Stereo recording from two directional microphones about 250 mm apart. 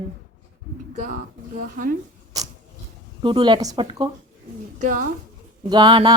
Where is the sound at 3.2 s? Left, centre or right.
Centre.